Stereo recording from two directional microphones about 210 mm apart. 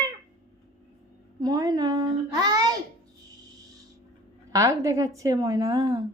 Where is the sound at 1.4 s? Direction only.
15° right (ahead or behind).